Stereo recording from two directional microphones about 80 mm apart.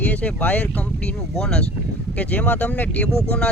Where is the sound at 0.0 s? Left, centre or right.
Centre.